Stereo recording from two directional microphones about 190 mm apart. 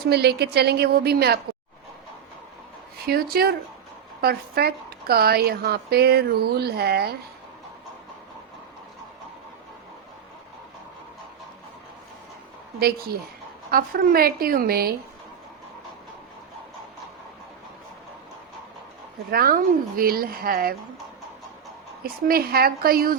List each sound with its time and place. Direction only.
0.1 s a woman's voice: 60° right (ahead or behind)
3.1 s a woman's voice: 55° right (ahead or behind)
13.7 s a woman's voice: 50° right (ahead or behind)
19.3 s a woman's voice: 50° right (ahead or behind)
22.0 s a woman's voice: 50° right (ahead or behind)